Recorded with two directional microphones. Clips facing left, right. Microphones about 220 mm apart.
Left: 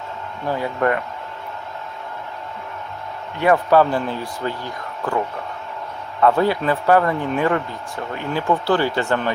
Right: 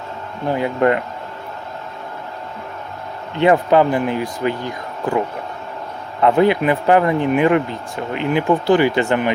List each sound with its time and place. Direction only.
0.4 s speech: 20° right (ahead or behind)
3.3 s speech: 20° right (ahead or behind)